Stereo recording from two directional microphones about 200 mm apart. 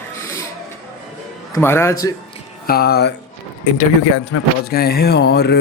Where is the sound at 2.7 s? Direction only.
50° left (ahead or behind).